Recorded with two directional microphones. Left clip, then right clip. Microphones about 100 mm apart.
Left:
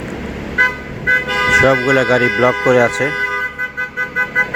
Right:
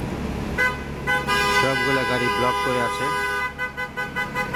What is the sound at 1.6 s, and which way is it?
Speech, 40° left (ahead or behind).